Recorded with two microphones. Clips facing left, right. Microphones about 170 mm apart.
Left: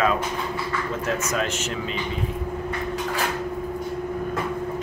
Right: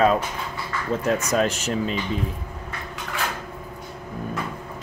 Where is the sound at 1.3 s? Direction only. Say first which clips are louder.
Right 4 dB; 35° right (ahead or behind).